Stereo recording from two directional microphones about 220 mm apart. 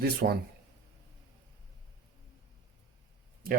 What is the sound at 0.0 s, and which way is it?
Speech, 45° right (ahead or behind).